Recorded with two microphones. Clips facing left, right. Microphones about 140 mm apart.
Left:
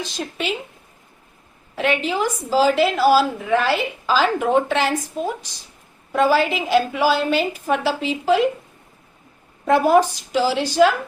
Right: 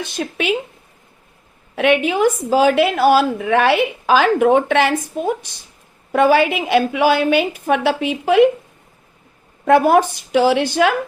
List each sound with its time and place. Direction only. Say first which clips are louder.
0.0 s a woman's voice: right 4 dB; 60° right (ahead or behind)
1.7 s a woman's voice: right 5 dB; 65° right (ahead or behind)
9.6 s a woman's voice: right 3 dB; 60° right (ahead or behind)